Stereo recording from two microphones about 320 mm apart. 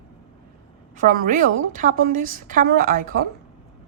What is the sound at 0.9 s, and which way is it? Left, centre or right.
A woman's voice, right.